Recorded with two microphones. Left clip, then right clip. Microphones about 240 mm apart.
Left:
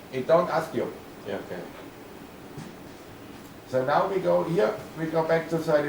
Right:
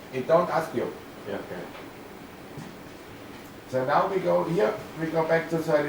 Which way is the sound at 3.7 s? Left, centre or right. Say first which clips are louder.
Even; centre.